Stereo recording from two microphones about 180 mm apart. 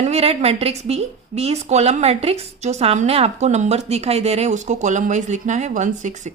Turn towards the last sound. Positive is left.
turn(degrees=-40)  # may be behind; listen again after turning